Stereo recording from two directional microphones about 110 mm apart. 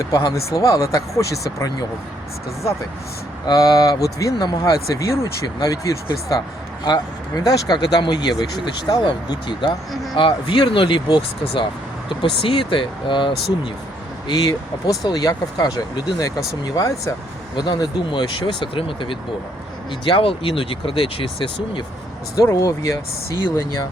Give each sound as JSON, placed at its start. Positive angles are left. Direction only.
{"t": 0.0, "sound": "speech", "side_deg": 35}
{"t": 3.4, "sound": "speech", "side_deg": 35}
{"t": 14.8, "sound": "speech", "side_deg": 35}
{"t": 17.6, "sound": "speech", "side_deg": 40}
{"t": 22.4, "sound": "speech", "side_deg": 30}